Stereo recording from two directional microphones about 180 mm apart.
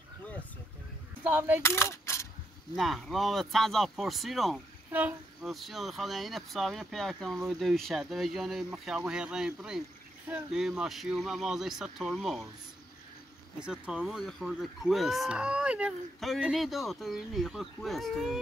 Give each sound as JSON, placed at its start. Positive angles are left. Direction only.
{"t": 1.2, "sound": "coin", "side_deg": -10}
{"t": 1.6, "sound": "coin", "side_deg": 15}
{"t": 2.7, "sound": "speech", "side_deg": 0}
{"t": 13.7, "sound": "speech", "side_deg": -5}